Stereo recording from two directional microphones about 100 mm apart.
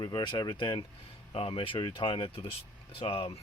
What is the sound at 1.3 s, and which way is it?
Speech, 70° left (ahead or behind).